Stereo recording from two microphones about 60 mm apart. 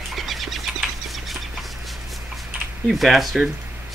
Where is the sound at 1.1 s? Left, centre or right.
Centre.